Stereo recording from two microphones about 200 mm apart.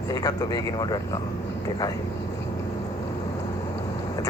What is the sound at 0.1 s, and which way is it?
Speech, 20° left (ahead or behind).